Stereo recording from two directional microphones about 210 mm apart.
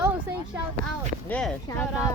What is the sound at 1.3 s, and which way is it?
Speech, 5° left (ahead or behind).